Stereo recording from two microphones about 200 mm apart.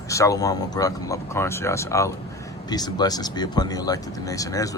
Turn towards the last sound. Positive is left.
turn(degrees=15)  # may be behind; listen again after turning